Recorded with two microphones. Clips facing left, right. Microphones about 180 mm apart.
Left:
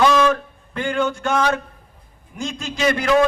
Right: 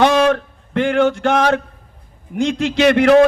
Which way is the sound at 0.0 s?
65° right (ahead or behind).